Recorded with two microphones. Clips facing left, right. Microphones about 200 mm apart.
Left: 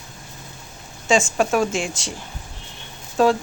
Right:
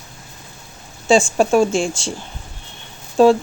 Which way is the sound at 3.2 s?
30° right (ahead or behind).